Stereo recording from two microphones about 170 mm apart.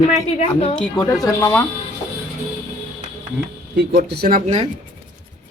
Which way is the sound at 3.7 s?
70° right (ahead or behind).